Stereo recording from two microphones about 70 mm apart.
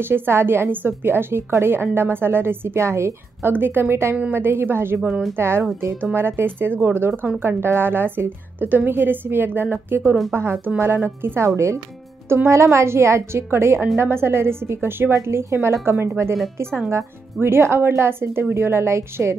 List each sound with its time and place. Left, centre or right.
0.0 s a woman's voice: right
3.5 s a woman's voice: right